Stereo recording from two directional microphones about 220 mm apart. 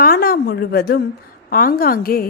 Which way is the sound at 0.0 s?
45° left (ahead or behind).